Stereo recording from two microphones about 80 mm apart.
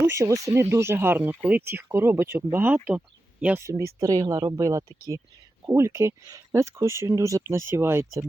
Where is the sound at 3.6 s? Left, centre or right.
Right.